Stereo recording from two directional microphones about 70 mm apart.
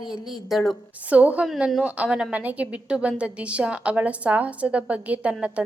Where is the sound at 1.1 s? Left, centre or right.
Right.